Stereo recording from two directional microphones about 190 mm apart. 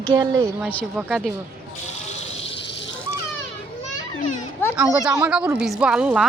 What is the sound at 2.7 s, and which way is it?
Cat, 70° left (ahead or behind).